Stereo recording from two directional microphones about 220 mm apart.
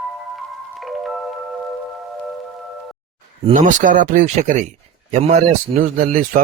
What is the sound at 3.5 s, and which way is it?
Speech, 35° right (ahead or behind).